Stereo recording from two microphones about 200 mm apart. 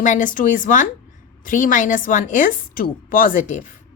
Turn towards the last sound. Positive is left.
turn(degrees=35)  # may be behind; listen again after turning